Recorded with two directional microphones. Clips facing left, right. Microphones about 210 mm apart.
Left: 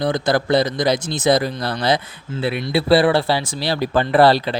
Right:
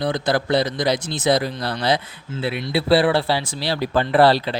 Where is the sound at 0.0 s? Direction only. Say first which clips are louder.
Left 2 dB; 45° left (ahead or behind).